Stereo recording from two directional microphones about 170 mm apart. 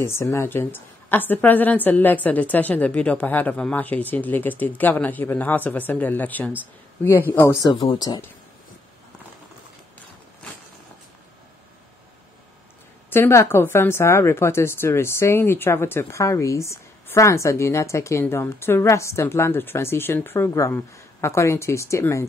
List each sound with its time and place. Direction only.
0.0 s a woman's voice: 15° left (ahead or behind)
13.1 s a woman's voice: 15° left (ahead or behind)